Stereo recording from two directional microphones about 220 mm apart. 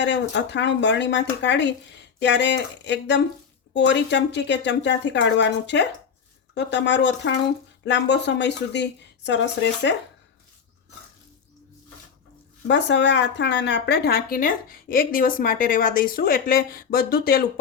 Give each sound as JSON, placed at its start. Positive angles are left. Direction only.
{"t": 0.0, "sound": "a woman's voice", "side_deg": 55}
{"t": 12.6, "sound": "a woman's voice", "side_deg": 55}